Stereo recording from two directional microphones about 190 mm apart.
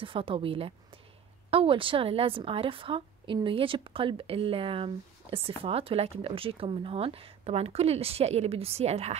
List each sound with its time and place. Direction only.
0.0 s a woman's voice: 25° right (ahead or behind)